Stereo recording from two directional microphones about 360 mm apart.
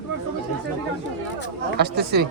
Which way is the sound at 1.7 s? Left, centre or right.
Right.